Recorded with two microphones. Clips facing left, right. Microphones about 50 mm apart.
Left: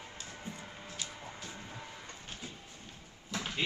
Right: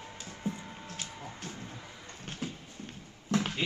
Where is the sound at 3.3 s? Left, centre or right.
Right.